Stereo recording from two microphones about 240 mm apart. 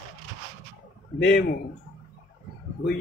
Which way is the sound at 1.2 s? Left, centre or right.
Left.